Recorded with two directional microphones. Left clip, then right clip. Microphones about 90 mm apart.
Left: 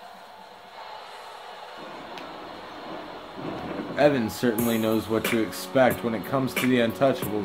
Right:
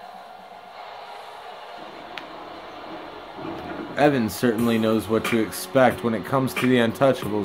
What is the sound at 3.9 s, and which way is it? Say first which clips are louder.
Speech: right 1 dB; 90° right.